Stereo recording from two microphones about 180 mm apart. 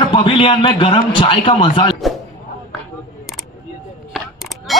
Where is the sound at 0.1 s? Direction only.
25° left (ahead or behind).